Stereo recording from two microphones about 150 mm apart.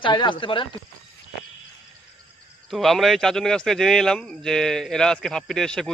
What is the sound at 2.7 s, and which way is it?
Speech, centre (ahead or behind).